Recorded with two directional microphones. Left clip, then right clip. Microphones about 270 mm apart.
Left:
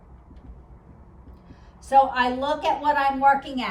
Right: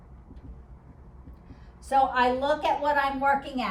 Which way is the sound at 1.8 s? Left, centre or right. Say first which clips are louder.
Left 4 dB; centre.